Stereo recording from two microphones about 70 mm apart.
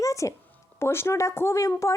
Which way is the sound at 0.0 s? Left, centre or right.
Left.